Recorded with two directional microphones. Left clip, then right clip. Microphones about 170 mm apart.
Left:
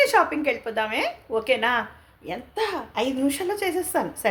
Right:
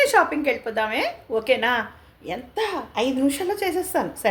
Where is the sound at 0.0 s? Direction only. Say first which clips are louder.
Right 1 dB; centre (ahead or behind).